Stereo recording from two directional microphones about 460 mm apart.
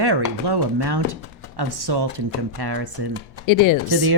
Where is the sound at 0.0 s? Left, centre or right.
Right.